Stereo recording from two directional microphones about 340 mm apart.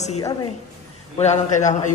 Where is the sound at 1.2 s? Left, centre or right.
Left.